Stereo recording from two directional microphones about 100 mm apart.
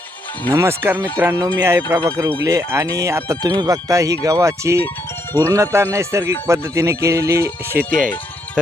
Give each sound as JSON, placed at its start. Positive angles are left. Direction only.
{"t": 0.5, "sound": "speech", "side_deg": -25}